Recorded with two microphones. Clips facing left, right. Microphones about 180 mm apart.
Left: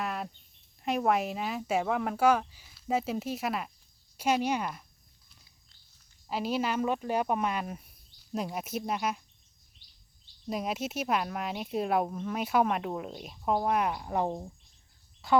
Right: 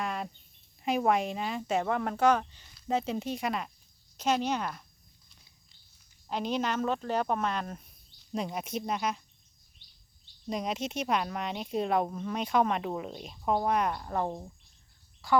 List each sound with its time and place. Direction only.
0.0 s a sound: 5° left (ahead or behind)
0.8 s speech: centre (ahead or behind)
6.2 s speech: 5° left (ahead or behind)
10.4 s speech: 5° left (ahead or behind); by 15.4 s 20° left (ahead or behind)